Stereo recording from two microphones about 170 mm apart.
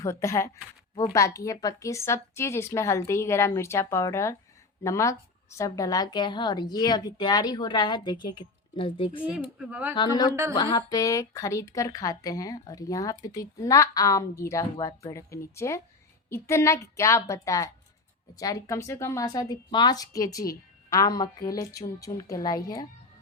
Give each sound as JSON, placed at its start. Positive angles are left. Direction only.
{"t": 0.0, "sound": "a woman's voice", "side_deg": 15}
{"t": 9.2, "sound": "speech", "side_deg": -5}
{"t": 10.5, "sound": "a woman's voice", "side_deg": 25}